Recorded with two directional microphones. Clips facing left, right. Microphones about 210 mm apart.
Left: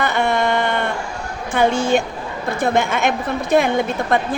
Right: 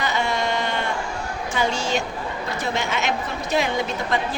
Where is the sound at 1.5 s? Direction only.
55° left (ahead or behind).